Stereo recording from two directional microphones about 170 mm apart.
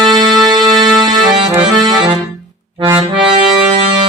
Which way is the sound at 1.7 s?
25° right (ahead or behind).